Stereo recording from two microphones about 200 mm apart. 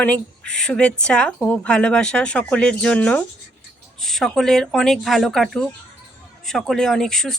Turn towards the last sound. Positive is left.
turn(degrees=0)  # may be behind; listen again after turning